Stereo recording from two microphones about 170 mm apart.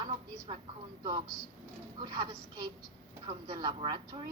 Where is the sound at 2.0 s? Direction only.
20° right (ahead or behind).